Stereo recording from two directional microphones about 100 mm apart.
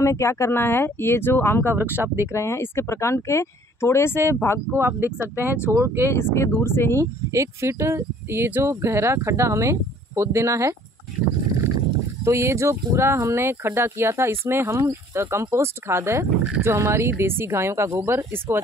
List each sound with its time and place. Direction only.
0.0 s speech: 30° left (ahead or behind)
1.7 s speech: 20° right (ahead or behind)
2.3 s speech: 25° left (ahead or behind)
4.7 s speech: 25° right (ahead or behind)
6.0 s speech: 25° left (ahead or behind)
7.0 s speech: 30° right (ahead or behind)
12.3 s speech: 30° right (ahead or behind)